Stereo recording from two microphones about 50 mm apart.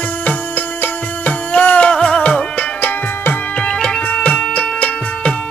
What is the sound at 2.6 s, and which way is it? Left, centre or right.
Tabla, left.